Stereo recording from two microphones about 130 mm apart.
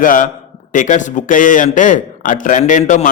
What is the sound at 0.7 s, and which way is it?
Speech, 75° left (ahead or behind).